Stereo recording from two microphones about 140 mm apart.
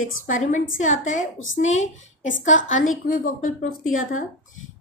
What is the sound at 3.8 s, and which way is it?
Speech, 70° left (ahead or behind).